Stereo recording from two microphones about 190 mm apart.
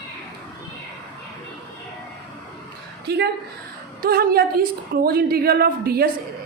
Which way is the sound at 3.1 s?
60° right (ahead or behind).